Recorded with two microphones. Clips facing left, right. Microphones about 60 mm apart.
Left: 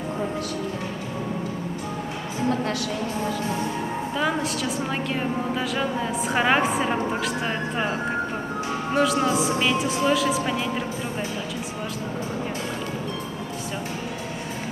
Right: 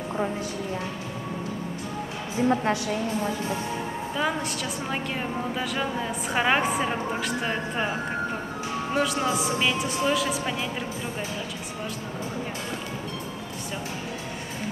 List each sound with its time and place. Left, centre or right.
2.5 s a woman's voice: right
4.2 s a woman's voice: centre
8.9 s a woman's voice: centre